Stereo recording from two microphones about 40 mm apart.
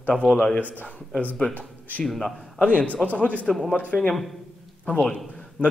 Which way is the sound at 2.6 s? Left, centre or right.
Left.